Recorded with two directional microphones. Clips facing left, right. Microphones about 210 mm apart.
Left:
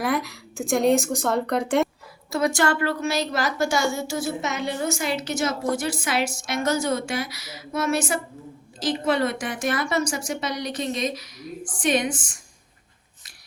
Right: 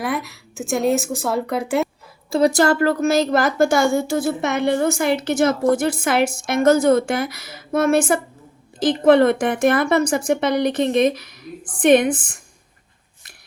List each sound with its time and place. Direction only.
0.0 s a woman's voice: centre (ahead or behind)
2.3 s a woman's voice: 35° right (ahead or behind); by 12.4 s 55° right (ahead or behind)